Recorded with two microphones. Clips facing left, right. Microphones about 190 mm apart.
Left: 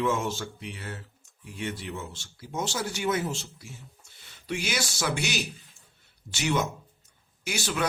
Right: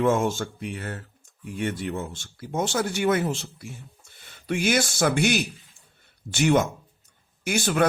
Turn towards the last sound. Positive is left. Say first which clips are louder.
# right 8 dB
turn(degrees=-50)  # may be behind; listen again after turning